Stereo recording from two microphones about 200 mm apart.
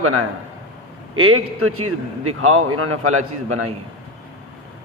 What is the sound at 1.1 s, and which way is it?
A man's voice, 90° right.